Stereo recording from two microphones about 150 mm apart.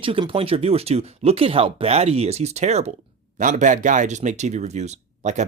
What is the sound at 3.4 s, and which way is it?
Speech, 60° right (ahead or behind).